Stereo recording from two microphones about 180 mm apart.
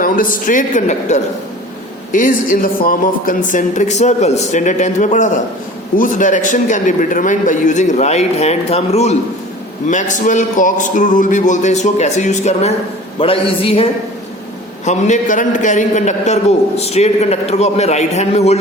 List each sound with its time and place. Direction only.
0.0 s a man's voice: 50° left (ahead or behind); by 13.8 s 30° left (ahead or behind)
14.8 s a man's voice: 40° left (ahead or behind)